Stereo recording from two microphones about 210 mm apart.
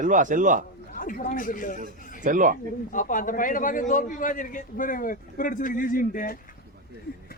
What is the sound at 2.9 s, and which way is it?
A man's voice, 40° left (ahead or behind).